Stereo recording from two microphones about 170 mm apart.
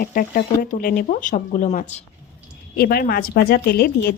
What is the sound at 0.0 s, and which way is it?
Speech, 55° left (ahead or behind).